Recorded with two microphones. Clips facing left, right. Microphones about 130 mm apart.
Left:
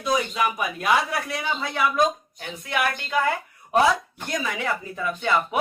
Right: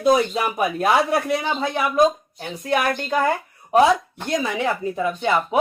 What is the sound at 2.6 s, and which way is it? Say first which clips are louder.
Speech: right 5 dB; 40° right (ahead or behind).